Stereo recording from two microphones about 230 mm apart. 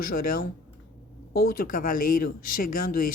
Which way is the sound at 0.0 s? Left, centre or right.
Left.